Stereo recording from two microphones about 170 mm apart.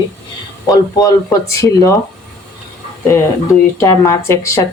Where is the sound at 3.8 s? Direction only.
15° left (ahead or behind).